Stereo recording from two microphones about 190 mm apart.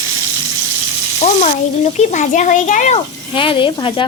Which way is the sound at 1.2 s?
35° left (ahead or behind).